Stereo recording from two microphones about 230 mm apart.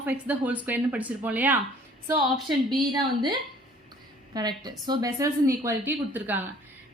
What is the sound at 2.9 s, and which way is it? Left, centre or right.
A woman's voice, centre.